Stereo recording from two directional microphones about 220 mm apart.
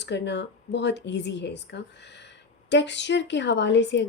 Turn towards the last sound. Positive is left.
turn(degrees=55)  # may be behind; listen again after turning